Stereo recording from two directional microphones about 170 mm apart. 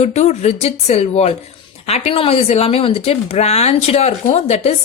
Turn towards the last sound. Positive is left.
turn(degrees=40)  # may be behind; listen again after turning